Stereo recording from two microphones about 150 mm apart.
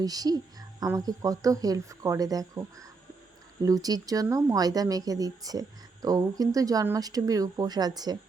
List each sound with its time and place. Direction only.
0.0 s speech: 25° right (ahead or behind)